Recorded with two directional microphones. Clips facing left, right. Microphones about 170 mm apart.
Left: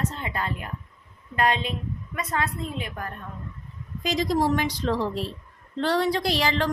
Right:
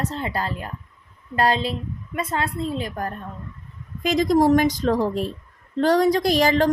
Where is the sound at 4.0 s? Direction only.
50° right (ahead or behind).